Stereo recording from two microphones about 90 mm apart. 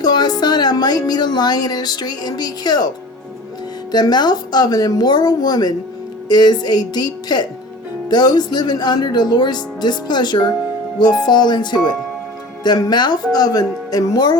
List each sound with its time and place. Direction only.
0.0 s speech: 50° left (ahead or behind)
3.9 s speech: 50° left (ahead or behind)